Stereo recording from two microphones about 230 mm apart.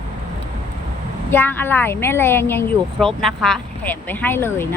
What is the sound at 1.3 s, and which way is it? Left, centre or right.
Speech, centre.